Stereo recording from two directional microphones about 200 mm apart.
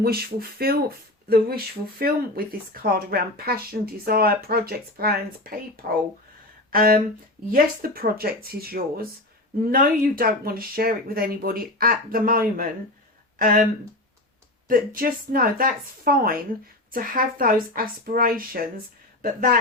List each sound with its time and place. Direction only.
0.0 s speech: 50° right (ahead or behind)
14.7 s speech: 45° right (ahead or behind)